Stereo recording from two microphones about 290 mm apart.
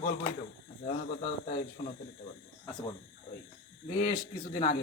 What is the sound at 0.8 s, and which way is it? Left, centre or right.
Speech, left.